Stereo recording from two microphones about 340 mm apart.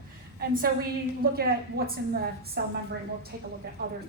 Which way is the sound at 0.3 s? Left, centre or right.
Right.